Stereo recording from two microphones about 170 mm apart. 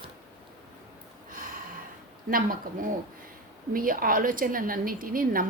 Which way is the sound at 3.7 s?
55° right (ahead or behind).